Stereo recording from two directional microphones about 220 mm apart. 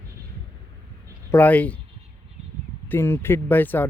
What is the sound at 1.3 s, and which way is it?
Speech, 10° left (ahead or behind).